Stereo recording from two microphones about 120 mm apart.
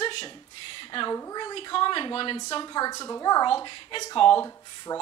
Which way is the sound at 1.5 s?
45° left (ahead or behind).